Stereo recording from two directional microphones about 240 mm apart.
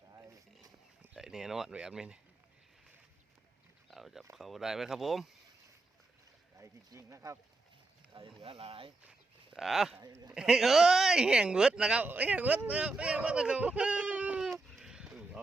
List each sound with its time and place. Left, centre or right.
1.1 s speech: centre
3.8 s a sound: centre
4.4 s speech: centre
6.6 s speech: centre
8.4 s speech: right
9.0 s a sound: centre
10.0 s speech: centre
10.3 s speech: centre